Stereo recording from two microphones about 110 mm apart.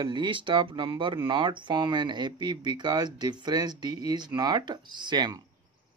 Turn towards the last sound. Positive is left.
turn(degrees=-40)  # may be behind; listen again after turning